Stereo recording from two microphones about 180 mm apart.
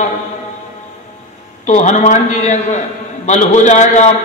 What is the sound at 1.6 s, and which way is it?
Mantra, 40° left (ahead or behind).